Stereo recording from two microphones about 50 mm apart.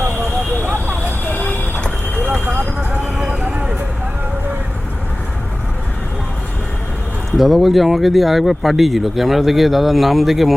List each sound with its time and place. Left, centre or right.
0.9 s vehicle: left
2.2 s vehicle: right
7.3 s speech: centre